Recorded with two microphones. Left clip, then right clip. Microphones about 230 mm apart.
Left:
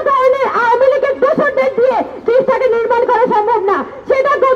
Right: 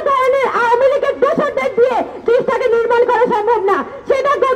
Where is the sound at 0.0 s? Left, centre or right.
Right.